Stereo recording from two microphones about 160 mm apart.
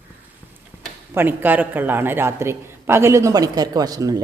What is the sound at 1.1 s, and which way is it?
Speech, 10° right (ahead or behind).